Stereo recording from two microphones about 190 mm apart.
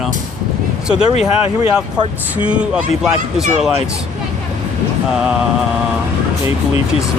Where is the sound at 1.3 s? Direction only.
30° left (ahead or behind).